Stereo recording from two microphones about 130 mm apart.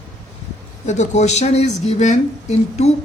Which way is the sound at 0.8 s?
65° left (ahead or behind).